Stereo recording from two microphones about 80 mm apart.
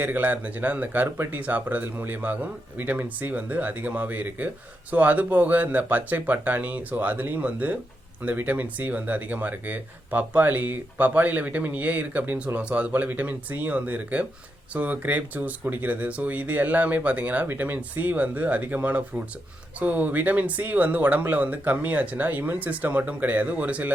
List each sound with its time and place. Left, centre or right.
0.0 s speech: right